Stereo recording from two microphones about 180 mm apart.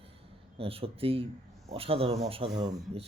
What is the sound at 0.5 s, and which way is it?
Speech, 30° right (ahead or behind).